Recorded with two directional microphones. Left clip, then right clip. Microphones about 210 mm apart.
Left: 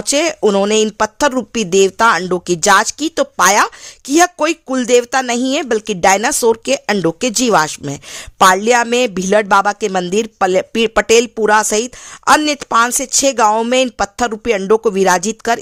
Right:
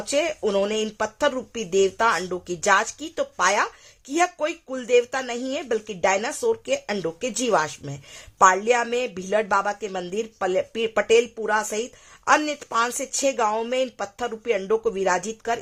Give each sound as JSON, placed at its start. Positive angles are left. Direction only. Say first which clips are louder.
{"t": 0.0, "sound": "speech", "louder": "left 9 dB", "side_deg": 40}